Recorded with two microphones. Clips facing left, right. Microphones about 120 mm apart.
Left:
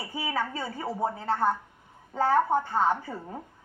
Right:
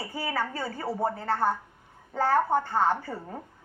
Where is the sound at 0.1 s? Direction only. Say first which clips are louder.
Left 1 dB; 20° left (ahead or behind).